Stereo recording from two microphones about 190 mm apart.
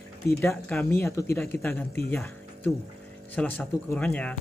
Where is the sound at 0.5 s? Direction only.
5° left (ahead or behind).